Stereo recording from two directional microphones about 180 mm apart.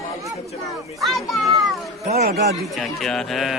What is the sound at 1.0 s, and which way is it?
Speech, centre (ahead or behind).